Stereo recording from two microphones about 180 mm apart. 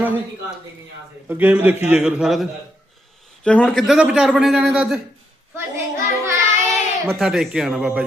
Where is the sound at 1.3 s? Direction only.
10° right (ahead or behind).